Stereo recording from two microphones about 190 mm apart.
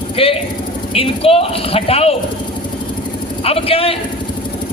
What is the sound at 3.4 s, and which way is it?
Speech, 30° left (ahead or behind).